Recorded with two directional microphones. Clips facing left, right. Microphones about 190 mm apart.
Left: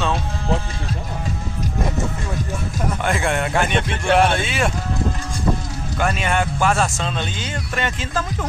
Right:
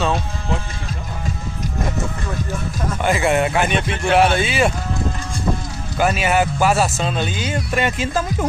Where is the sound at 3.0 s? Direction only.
Centre (ahead or behind).